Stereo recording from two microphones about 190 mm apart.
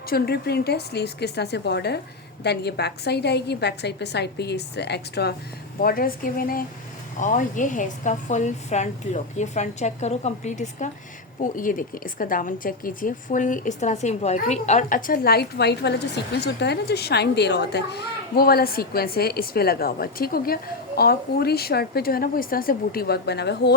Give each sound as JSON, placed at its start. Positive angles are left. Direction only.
{"t": 0.1, "sound": "a woman's voice", "side_deg": 55}